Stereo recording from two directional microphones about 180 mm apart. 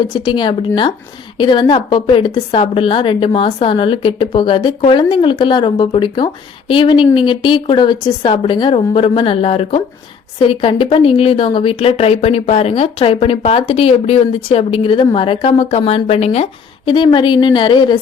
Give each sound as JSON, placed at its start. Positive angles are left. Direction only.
{"t": 0.1, "sound": "a woman's voice", "side_deg": 25}